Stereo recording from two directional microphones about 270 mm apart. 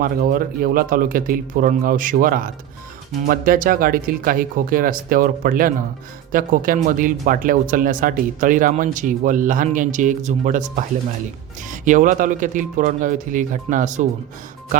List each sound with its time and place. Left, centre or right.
0.0 s speech: right